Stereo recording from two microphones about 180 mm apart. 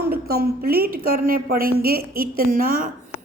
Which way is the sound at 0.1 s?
60° right (ahead or behind).